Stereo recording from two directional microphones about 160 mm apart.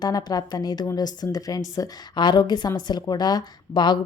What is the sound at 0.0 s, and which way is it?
A woman's voice, 25° left (ahead or behind).